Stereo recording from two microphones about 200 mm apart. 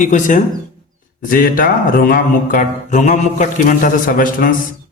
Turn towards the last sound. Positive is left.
turn(degrees=45)  # may be behind; listen again after turning